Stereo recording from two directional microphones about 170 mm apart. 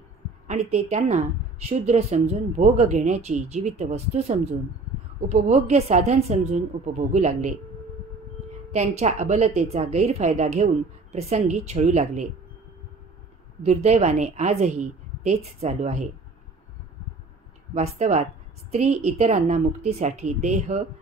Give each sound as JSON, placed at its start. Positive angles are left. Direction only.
{"t": 0.5, "sound": "a woman's voice", "side_deg": -40}
{"t": 8.7, "sound": "a woman's voice", "side_deg": -45}
{"t": 13.6, "sound": "a woman's voice", "side_deg": -40}
{"t": 17.7, "sound": "a woman's voice", "side_deg": -40}